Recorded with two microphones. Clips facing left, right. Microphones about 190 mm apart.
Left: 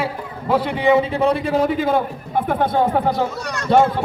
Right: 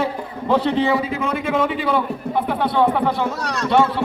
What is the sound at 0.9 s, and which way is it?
A man's voice, 35° left (ahead or behind).